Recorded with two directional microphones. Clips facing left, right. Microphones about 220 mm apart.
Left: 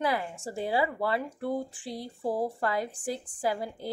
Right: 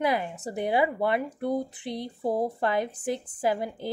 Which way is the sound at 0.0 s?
20° right (ahead or behind).